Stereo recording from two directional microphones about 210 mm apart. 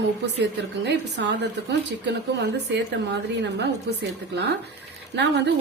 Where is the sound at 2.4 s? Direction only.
55° right (ahead or behind).